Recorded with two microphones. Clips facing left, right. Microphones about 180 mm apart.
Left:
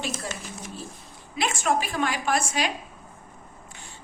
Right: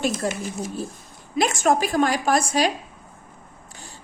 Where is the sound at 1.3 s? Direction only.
45° right (ahead or behind).